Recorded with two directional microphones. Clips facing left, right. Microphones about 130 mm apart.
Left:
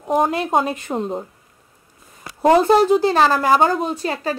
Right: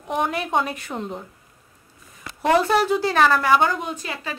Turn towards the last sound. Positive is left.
turn(degrees=35)  # may be behind; listen again after turning